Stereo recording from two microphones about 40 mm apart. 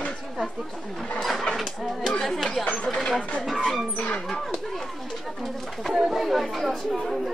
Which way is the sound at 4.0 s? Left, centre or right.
Centre.